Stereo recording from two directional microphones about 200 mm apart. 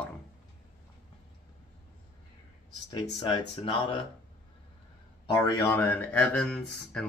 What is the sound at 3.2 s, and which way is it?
Speech, 25° left (ahead or behind).